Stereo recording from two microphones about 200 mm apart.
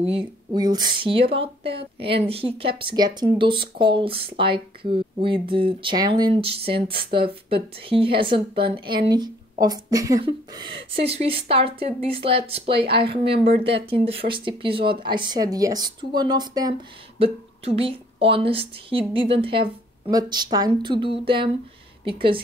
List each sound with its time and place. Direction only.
0.0 s speech: 25° right (ahead or behind)